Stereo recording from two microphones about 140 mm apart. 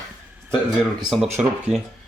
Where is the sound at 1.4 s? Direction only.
10° right (ahead or behind).